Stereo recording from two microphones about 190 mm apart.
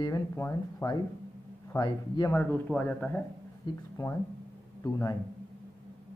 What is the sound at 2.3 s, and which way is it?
Speech, 10° left (ahead or behind).